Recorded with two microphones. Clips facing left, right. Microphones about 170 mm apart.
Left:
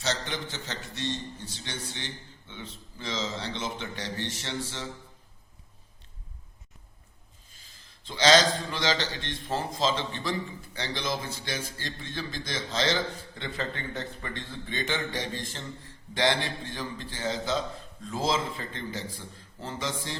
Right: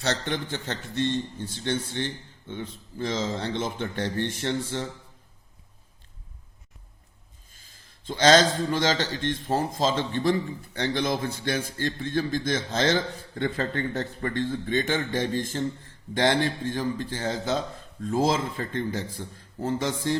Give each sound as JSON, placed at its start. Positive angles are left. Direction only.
{"t": 0.0, "sound": "a man's voice", "side_deg": -55}
{"t": 7.5, "sound": "a man's voice", "side_deg": -50}